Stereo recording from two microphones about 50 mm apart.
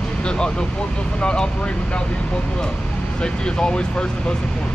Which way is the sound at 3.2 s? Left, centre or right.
Centre.